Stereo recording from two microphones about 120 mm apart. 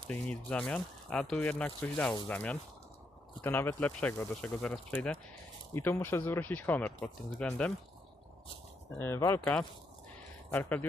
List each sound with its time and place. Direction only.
0.1 s speech: 10° left (ahead or behind)
9.0 s speech: 20° left (ahead or behind)
9.4 s speech: 5° left (ahead or behind)